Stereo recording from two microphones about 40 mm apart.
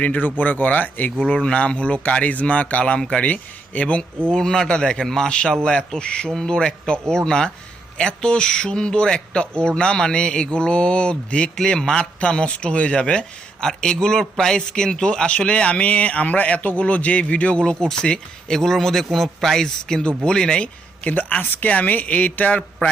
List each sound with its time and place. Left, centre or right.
0.0 s speech: left
1.3 s speech: left
3.0 s speech: left
3.2 s speech: left
4.3 s speech: centre
11.8 s speech: centre
12.2 s speech: left
17.6 s speech: centre
21.0 s speech: left